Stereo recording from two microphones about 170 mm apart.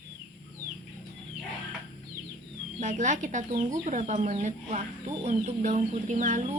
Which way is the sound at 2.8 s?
45° right (ahead or behind).